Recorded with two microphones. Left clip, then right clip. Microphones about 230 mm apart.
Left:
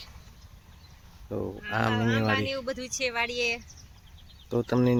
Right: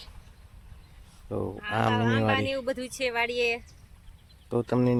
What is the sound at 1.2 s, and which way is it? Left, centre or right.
Speech, centre.